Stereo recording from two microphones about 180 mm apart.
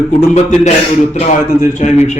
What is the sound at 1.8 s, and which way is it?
Speech, 40° left (ahead or behind).